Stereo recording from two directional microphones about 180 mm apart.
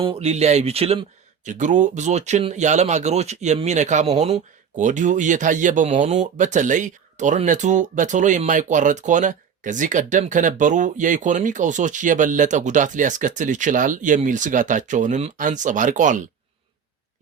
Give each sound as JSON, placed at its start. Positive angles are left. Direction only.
{"t": 0.0, "sound": "speech", "side_deg": -30}
{"t": 1.5, "sound": "speech", "side_deg": -45}